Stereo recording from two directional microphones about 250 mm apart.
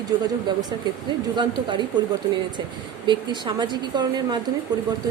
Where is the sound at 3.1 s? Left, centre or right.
Centre.